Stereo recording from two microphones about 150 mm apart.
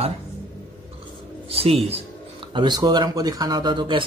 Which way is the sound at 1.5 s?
40° right (ahead or behind).